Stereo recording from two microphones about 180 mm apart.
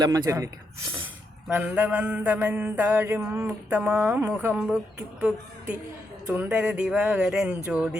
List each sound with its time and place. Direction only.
0.0 s mantra: 20° right (ahead or behind)
1.5 s mantra: 10° right (ahead or behind)
6.2 s speech: 10° right (ahead or behind)